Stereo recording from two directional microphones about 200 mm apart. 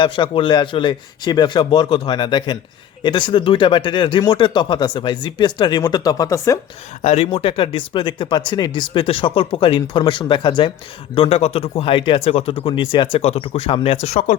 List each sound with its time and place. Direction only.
0.0 s speech: 25° left (ahead or behind)
7.0 s speech: 30° left (ahead or behind)